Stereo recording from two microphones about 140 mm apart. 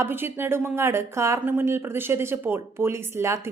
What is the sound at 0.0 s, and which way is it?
Speech, 15° right (ahead or behind).